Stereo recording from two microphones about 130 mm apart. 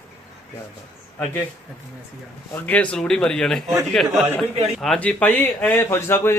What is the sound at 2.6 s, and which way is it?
A man's voice, 10° left (ahead or behind).